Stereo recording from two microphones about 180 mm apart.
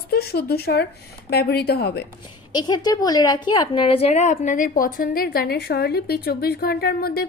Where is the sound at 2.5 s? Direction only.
25° left (ahead or behind).